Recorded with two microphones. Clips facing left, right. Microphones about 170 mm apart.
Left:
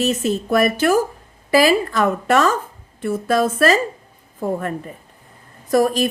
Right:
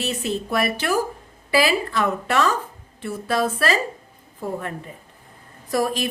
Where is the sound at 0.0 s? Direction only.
45° left (ahead or behind).